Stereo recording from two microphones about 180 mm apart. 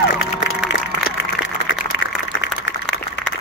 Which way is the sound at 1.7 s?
90° left.